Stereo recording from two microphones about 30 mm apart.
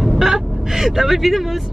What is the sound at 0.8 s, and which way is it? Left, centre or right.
Speech, centre.